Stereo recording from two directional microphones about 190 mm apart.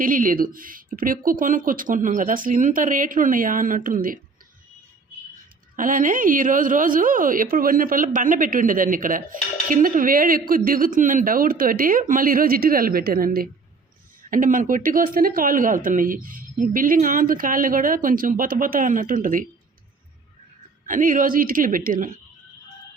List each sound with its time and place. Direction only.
0.0 s speech: 45° right (ahead or behind)
5.7 s speech: 45° right (ahead or behind)
20.8 s speech: 45° right (ahead or behind)